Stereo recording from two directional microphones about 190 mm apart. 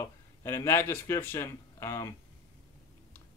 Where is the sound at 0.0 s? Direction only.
15° left (ahead or behind).